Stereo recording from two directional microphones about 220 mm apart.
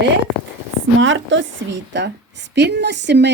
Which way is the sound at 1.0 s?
60° right (ahead or behind).